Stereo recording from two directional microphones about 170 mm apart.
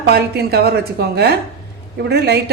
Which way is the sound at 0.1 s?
65° right (ahead or behind).